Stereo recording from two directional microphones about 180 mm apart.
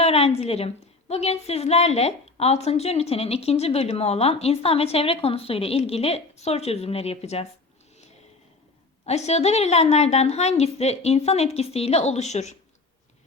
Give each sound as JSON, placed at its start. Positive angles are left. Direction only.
{"t": 0.0, "sound": "a woman's voice", "side_deg": 35}
{"t": 9.0, "sound": "a woman's voice", "side_deg": 35}